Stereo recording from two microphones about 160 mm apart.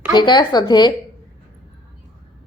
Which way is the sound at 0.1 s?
30° left (ahead or behind).